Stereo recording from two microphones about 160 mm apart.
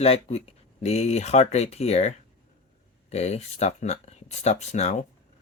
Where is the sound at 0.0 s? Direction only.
40° left (ahead or behind).